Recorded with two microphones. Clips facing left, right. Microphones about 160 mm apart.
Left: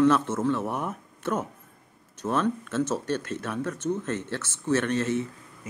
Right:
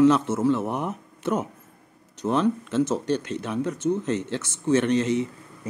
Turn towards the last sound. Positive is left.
turn(degrees=-15)  # may be behind; listen again after turning